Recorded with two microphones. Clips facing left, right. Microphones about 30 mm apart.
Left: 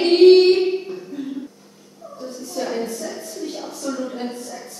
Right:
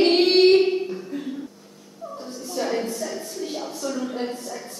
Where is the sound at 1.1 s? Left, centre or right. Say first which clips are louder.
Left 1 dB; right.